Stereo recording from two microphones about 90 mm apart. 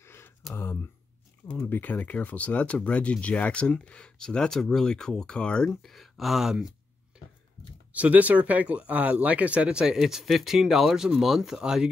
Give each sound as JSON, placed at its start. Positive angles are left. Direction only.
{"t": 0.0, "sound": "a sound", "side_deg": 25}
{"t": 1.7, "sound": "speech", "side_deg": 20}
{"t": 5.7, "sound": "speech", "side_deg": 0}
{"t": 7.9, "sound": "speech", "side_deg": -15}